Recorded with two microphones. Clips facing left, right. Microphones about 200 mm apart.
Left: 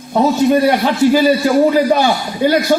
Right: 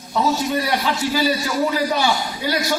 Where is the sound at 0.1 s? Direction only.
50° left (ahead or behind).